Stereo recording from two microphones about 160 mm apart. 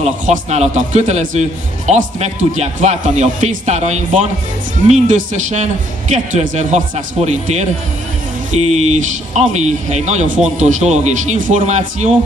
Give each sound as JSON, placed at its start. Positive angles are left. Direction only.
{"t": 0.0, "sound": "a man's voice", "side_deg": -45}